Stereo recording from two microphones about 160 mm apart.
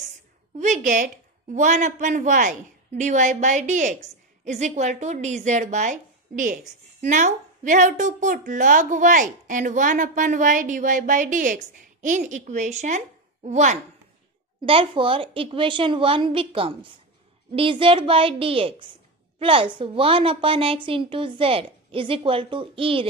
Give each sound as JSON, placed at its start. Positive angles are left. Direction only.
{"t": 0.6, "sound": "a woman's voice", "side_deg": -50}
{"t": 14.7, "sound": "a woman's voice", "side_deg": -35}